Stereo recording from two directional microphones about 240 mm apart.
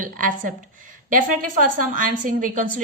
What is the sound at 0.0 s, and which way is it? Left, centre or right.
A woman's voice, right.